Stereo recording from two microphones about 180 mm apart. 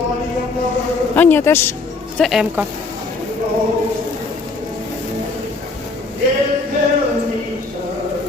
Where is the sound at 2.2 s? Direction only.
Centre (ahead or behind).